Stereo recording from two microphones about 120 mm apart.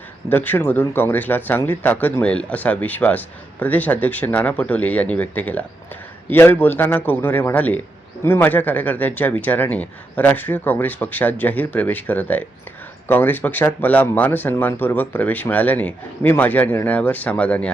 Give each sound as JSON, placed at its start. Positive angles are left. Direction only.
{"t": 0.3, "sound": "speech", "side_deg": 15}